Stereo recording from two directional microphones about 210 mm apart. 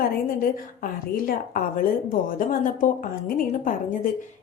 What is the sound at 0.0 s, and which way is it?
A woman's voice, 40° left (ahead or behind).